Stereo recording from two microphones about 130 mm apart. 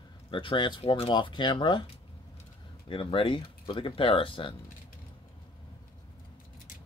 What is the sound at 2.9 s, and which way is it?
Speech, 40° left (ahead or behind).